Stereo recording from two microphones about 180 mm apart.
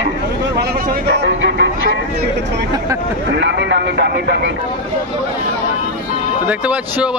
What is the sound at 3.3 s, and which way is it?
Speech, 75° right (ahead or behind).